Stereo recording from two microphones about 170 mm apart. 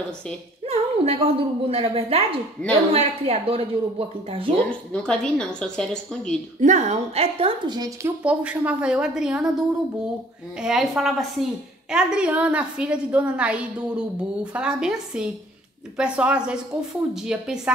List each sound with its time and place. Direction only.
0.7 s speech: 35° right (ahead or behind)
4.6 s a woman's voice: 5° left (ahead or behind)
6.6 s speech: 45° right (ahead or behind); by 8.1 s 25° right (ahead or behind)
8.2 s a woman's voice: 5° right (ahead or behind)